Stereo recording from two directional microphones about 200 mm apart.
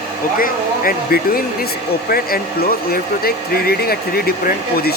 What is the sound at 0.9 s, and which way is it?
Speech, 50° left (ahead or behind).